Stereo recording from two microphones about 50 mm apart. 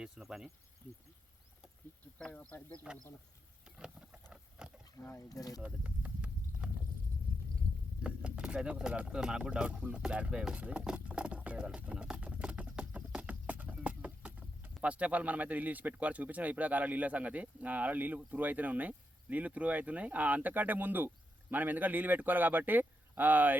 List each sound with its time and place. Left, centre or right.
0.2 s speech: centre
2.2 s speech: left
2.5 s speech: left
3.8 s a sound: centre
5.0 s speech: left
5.6 s a sound: right
8.0 s speech: right
11.8 s clip-clop: right
18.3 s speech: right